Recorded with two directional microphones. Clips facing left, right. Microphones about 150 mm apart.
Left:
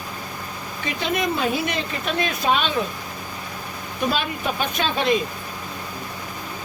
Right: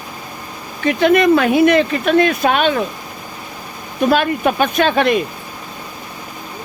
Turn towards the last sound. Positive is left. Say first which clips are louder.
# right 7 dB
turn(degrees=-65)  # may be behind; listen again after turning